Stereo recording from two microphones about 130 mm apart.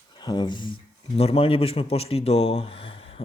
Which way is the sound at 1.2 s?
50° left (ahead or behind).